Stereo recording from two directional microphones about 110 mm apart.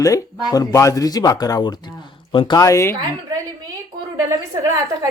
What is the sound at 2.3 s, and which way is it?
Speech, 50° left (ahead or behind).